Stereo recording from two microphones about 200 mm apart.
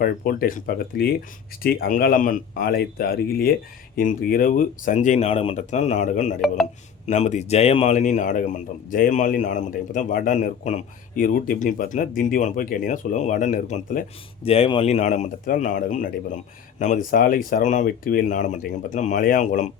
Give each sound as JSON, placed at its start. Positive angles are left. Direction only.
{"t": 0.0, "sound": "a man's voice", "side_deg": 45}